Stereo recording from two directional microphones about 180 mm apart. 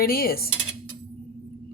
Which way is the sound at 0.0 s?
55° left (ahead or behind).